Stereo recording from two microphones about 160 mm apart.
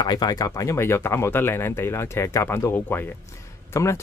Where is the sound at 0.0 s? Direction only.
25° left (ahead or behind).